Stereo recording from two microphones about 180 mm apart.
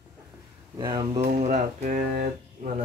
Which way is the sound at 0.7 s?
20° right (ahead or behind).